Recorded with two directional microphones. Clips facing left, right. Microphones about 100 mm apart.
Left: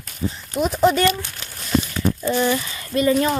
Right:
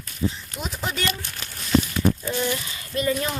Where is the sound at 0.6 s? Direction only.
60° left (ahead or behind).